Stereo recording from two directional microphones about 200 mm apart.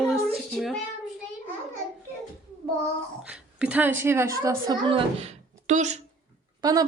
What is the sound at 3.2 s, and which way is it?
A woman's voice, 5° right (ahead or behind).